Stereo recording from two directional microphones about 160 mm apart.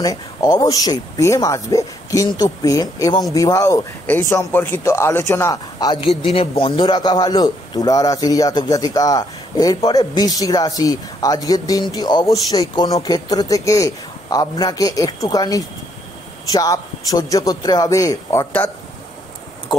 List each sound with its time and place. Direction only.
0.0 s a man's voice: 25° left (ahead or behind)